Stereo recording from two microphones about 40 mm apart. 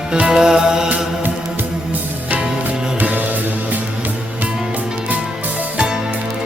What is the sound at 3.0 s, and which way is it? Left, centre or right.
Music, right.